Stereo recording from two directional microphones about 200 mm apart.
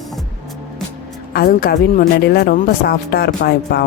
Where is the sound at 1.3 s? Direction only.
45° left (ahead or behind).